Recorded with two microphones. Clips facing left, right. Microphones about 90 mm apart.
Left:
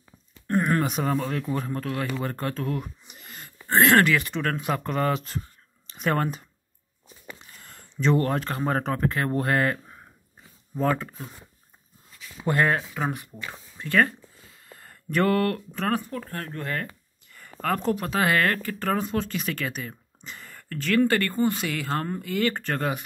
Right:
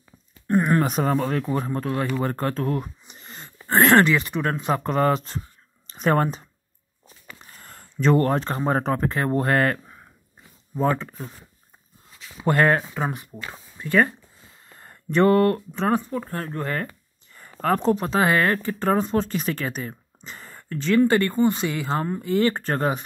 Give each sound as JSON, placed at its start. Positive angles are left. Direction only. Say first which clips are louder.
{"t": 0.5, "sound": "a sound", "louder": "right 3 dB", "side_deg": -20}
{"t": 0.7, "sound": "speech", "louder": "right 4 dB", "side_deg": -40}
{"t": 2.2, "sound": "a sound", "louder": "right 4 dB", "side_deg": -35}
{"t": 4.0, "sound": "speech", "louder": "right 2 dB", "side_deg": -20}
{"t": 4.6, "sound": "speech", "louder": "right 4 dB", "side_deg": -30}
{"t": 7.4, "sound": "a sound", "louder": "right 3 dB", "side_deg": -40}
{"t": 8.4, "sound": "speech", "louder": "right 3 dB", "side_deg": -30}
{"t": 10.8, "sound": "speech", "louder": "right 2 dB", "side_deg": -20}
{"t": 12.4, "sound": "speech", "louder": "right 4 dB", "side_deg": -45}
{"t": 12.9, "sound": "speech", "louder": "right 1 dB", "side_deg": -25}
{"t": 14.7, "sound": "speech", "louder": "right 3 dB", "side_deg": -30}
{"t": 20.2, "sound": "a sound", "louder": "right 2 dB", "side_deg": -35}
{"t": 20.6, "sound": "speech", "louder": "right 3 dB", "side_deg": -20}
{"t": 22.2, "sound": "speech", "louder": "right 5 dB", "side_deg": -30}